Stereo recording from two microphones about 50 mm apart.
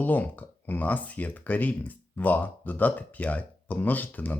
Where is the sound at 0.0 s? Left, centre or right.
Left.